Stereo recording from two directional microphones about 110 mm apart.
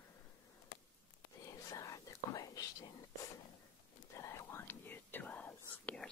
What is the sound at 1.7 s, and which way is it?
Whispering, 30° left (ahead or behind).